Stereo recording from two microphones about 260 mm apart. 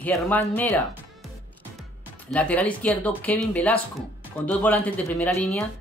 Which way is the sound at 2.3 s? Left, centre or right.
Centre.